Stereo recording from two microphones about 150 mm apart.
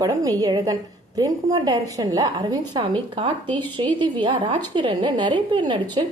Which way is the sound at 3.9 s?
35° right (ahead or behind).